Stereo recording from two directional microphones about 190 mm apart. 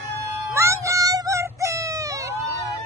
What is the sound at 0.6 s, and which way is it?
Music, 15° right (ahead or behind).